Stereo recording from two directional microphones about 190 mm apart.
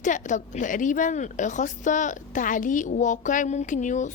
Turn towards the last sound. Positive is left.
turn(degrees=40)  # may be behind; listen again after turning